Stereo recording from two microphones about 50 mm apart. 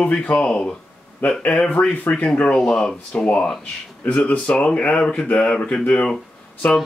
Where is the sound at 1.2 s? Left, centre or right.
Left.